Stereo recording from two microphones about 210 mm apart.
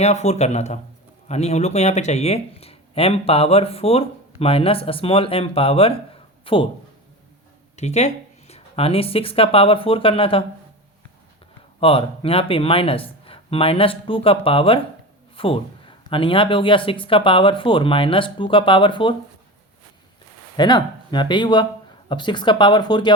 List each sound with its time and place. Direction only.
0.0 s speech: 30° left (ahead or behind)
7.8 s speech: 35° left (ahead or behind)
11.8 s speech: 25° left (ahead or behind)
20.6 s speech: 20° left (ahead or behind)